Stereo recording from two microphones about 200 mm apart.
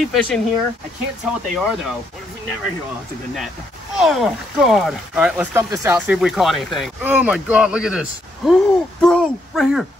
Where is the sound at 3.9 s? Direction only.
Centre (ahead or behind).